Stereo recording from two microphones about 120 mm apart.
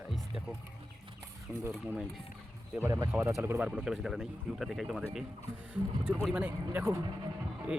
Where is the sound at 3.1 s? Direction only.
20° right (ahead or behind).